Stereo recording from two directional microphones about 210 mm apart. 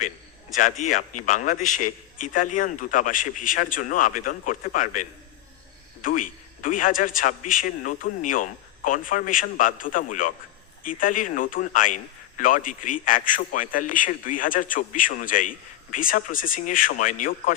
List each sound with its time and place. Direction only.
0.5 s a man's voice: 35° left (ahead or behind)